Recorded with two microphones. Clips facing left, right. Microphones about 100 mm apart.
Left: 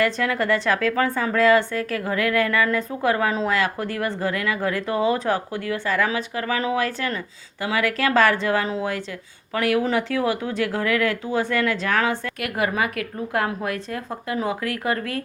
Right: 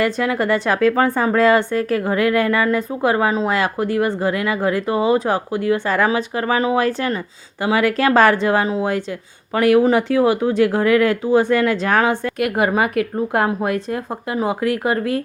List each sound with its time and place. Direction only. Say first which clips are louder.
0.0 s speech: right 3 dB; 20° right (ahead or behind)